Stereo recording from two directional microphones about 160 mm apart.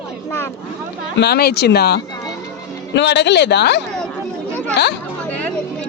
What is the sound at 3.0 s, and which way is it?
Speech, 90° left.